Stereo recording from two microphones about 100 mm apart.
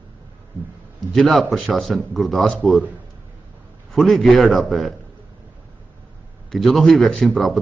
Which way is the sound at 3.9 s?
Centre (ahead or behind).